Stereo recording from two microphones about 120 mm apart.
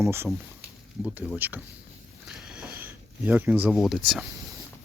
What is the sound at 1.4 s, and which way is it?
Speech, 15° right (ahead or behind).